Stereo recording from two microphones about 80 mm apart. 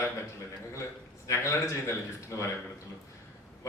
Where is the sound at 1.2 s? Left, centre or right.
Left.